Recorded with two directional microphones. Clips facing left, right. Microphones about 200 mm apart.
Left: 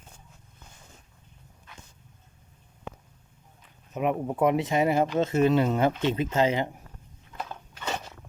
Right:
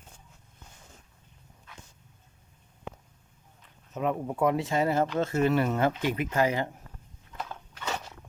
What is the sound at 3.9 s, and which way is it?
Speech, 20° left (ahead or behind).